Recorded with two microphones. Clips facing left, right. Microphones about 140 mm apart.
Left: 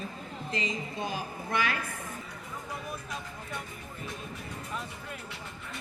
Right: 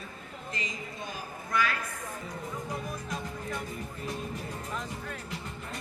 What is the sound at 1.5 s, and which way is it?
Speech, 25° left (ahead or behind).